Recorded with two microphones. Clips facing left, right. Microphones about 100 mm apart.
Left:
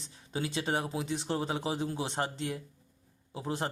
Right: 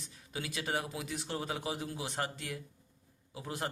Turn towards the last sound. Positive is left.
turn(degrees=30)  # may be behind; listen again after turning